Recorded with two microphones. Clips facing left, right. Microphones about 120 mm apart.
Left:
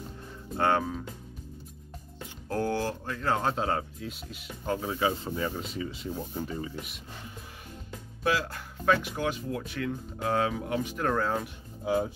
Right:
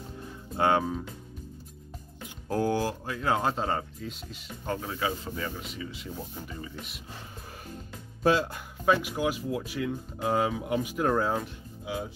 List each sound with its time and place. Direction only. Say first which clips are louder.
0.6 s speech: right 1 dB; 15° right (ahead or behind)
2.4 s speech: right 2 dB; 15° right (ahead or behind); by 4.9 s 5° left (ahead or behind)
4.9 s speech: left 3 dB; 25° left (ahead or behind)
8.2 s speech: right 4 dB; 30° right (ahead or behind)
8.5 s speech: right 1 dB; 15° right (ahead or behind)
11.8 s speech: left 7 dB; 45° left (ahead or behind)